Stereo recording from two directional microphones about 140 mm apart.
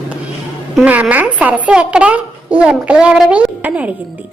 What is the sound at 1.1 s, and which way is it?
A woman's voice, 10° right (ahead or behind).